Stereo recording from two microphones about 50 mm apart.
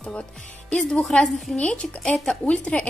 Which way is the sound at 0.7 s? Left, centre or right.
Left.